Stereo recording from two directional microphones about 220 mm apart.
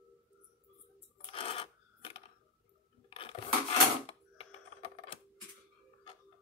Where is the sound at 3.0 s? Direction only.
25° left (ahead or behind).